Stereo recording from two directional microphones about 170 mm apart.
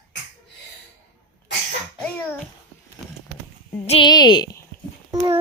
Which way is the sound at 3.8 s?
35° left (ahead or behind).